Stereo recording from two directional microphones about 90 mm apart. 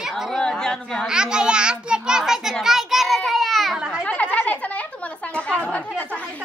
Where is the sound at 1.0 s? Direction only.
10° right (ahead or behind).